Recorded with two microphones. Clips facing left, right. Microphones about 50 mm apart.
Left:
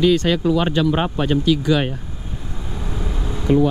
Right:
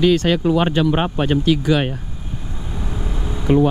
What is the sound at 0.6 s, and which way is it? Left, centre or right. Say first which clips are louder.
Speech: right 1 dB; centre.